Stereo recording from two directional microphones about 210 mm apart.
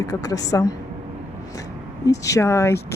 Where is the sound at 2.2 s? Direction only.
15° left (ahead or behind).